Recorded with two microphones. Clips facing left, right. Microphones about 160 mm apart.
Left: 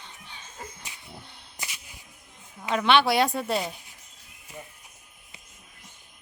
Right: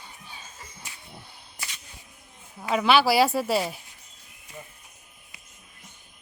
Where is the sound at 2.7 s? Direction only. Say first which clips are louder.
Right 1 dB; 5° right (ahead or behind).